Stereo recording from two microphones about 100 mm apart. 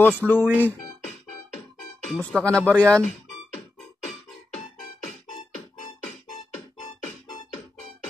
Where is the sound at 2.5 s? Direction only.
10° left (ahead or behind).